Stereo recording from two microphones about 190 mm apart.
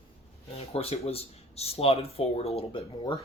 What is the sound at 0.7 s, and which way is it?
Speech, 30° left (ahead or behind).